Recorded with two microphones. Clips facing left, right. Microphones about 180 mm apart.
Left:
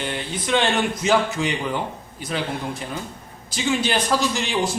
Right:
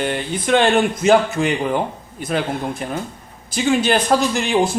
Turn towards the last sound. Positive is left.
turn(degrees=-55)  # may be behind; listen again after turning